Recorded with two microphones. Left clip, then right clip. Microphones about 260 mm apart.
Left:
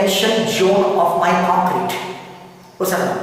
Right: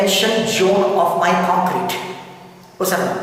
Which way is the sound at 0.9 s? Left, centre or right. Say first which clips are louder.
Even; right.